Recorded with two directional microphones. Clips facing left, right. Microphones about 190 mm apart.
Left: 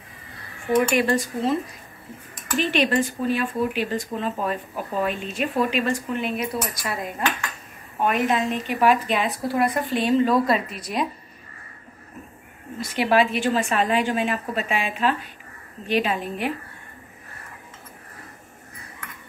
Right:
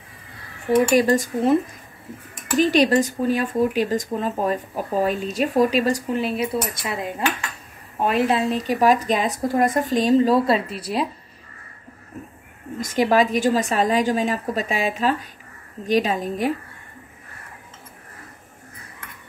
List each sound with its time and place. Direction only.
0.7 s speech: 35° right (ahead or behind)
12.8 s speech: 40° right (ahead or behind)